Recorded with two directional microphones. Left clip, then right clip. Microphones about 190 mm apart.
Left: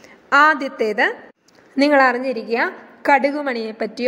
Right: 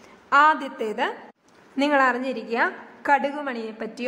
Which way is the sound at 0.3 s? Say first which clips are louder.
Left 4 dB; 15° left (ahead or behind).